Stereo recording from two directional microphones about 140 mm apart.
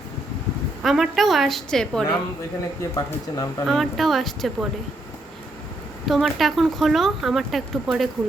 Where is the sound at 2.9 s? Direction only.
25° left (ahead or behind).